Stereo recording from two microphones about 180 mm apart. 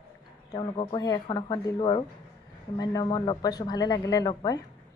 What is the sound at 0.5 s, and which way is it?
Speech, 25° left (ahead or behind).